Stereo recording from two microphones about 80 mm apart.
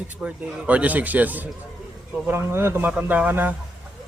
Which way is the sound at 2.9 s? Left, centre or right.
Centre.